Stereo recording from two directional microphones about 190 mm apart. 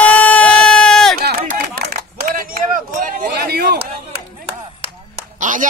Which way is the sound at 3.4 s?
55° right (ahead or behind).